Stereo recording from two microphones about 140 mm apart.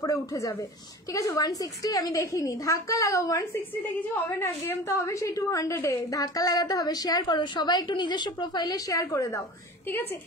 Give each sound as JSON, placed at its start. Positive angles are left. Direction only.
{"t": 0.0, "sound": "a woman's voice", "side_deg": 25}